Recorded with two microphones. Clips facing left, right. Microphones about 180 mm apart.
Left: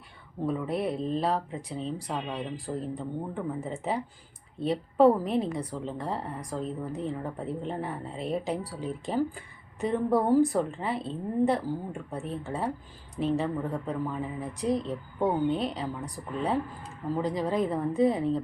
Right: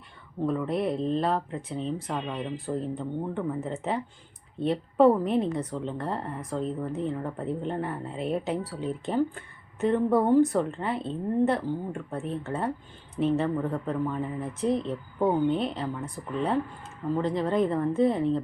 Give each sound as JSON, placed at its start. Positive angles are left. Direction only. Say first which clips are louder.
{"t": 0.4, "sound": "a woman's voice", "louder": "right 2 dB", "side_deg": 5}